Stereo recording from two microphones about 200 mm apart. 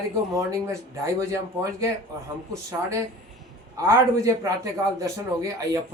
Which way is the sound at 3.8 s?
15° right (ahead or behind).